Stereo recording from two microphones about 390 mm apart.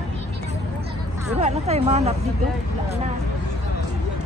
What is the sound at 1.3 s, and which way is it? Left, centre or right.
Speech, centre.